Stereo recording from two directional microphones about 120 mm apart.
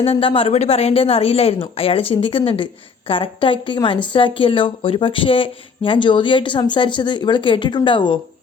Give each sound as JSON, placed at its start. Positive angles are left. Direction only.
{"t": 0.0, "sound": "a woman's voice", "side_deg": 50}